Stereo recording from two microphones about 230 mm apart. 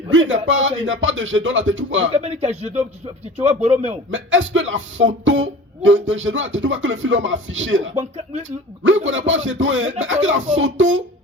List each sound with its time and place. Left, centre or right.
0.1 s speech: right
2.1 s speech: right
4.1 s speech: right
7.9 s speech: right
9.0 s speech: right